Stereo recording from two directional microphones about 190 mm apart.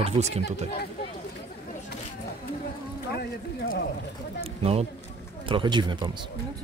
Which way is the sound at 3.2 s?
55° left (ahead or behind).